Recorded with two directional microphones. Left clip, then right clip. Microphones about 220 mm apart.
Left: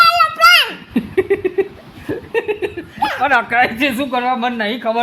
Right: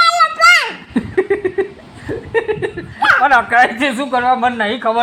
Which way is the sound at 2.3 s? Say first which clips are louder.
Right 2 dB; 10° left (ahead or behind).